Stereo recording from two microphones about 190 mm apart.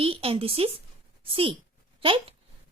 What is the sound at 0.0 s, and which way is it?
A woman's voice, 30° right (ahead or behind).